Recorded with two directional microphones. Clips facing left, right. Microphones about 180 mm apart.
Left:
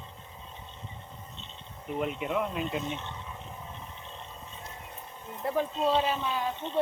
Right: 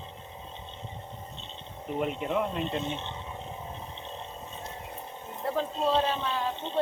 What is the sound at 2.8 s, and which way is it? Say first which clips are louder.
Speech: right 2 dB; 30° right (ahead or behind).